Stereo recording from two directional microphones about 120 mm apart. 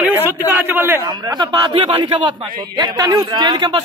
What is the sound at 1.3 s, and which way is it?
A man's voice, 35° right (ahead or behind).